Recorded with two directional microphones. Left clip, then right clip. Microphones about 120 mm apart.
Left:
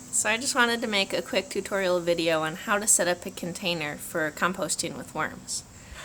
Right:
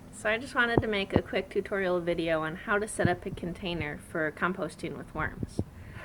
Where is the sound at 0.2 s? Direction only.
50° left (ahead or behind).